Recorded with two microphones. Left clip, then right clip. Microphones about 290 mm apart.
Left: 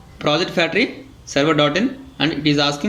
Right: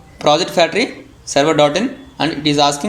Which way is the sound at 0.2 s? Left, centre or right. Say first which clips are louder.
Right 5 dB; centre.